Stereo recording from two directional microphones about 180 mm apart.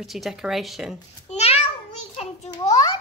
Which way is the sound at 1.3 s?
35° left (ahead or behind).